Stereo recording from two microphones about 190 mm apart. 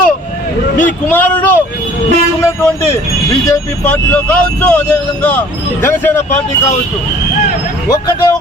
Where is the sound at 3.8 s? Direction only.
10° left (ahead or behind).